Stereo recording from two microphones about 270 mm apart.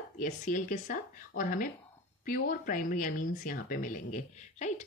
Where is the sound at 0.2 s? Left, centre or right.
Left.